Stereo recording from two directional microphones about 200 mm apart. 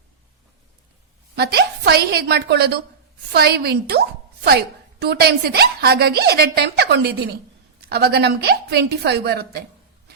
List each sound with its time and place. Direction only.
1.4 s a woman's voice: 55° right (ahead or behind)